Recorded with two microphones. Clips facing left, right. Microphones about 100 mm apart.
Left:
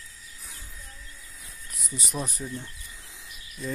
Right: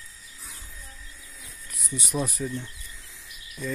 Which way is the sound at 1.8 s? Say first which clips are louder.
Right 4 dB; centre (ahead or behind).